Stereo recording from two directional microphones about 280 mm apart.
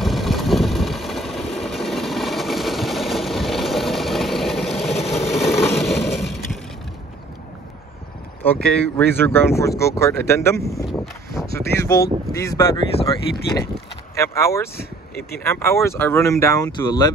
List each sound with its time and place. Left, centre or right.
0.0 s vehicle: centre
4.9 s vehicle: left
5.4 s a sound: centre
8.5 s speech: centre
14.8 s speech: left
15.4 s speech: centre